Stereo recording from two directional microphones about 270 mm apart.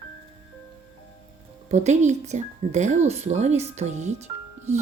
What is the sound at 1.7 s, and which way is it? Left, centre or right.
Speech, right.